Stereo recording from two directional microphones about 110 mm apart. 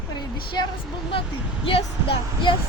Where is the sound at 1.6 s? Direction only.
55° left (ahead or behind).